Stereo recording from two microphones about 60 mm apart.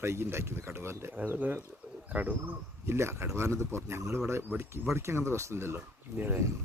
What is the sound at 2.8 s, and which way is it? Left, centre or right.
A man's voice, right.